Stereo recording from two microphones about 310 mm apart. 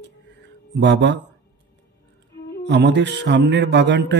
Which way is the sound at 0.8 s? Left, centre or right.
Right.